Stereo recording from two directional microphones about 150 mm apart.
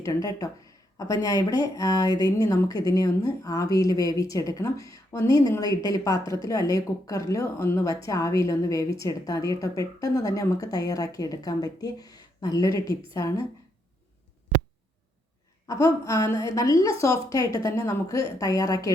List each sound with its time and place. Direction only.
0.0 s a woman's voice: 25° left (ahead or behind)
15.6 s a woman's voice: 20° left (ahead or behind)